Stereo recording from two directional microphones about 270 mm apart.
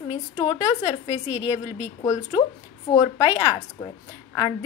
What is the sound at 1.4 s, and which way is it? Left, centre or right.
Speech, centre.